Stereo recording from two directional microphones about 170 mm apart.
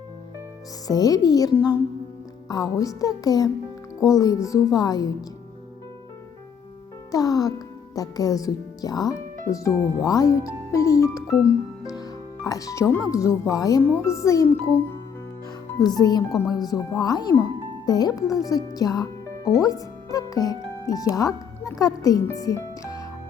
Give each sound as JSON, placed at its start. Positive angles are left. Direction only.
{"t": 0.9, "sound": "speech", "side_deg": 20}
{"t": 7.1, "sound": "speech", "side_deg": 20}
{"t": 11.8, "sound": "music", "side_deg": 20}
{"t": 13.1, "sound": "speech", "side_deg": 20}
{"t": 16.0, "sound": "speech", "side_deg": 25}